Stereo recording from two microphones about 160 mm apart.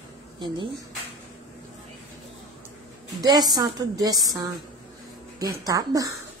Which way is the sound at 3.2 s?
25° right (ahead or behind).